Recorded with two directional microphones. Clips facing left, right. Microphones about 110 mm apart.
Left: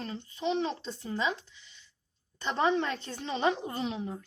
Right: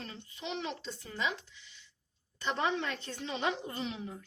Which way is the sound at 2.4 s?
35° left (ahead or behind).